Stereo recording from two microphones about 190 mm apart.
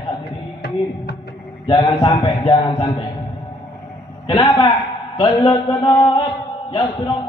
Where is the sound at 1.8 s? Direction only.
20° left (ahead or behind).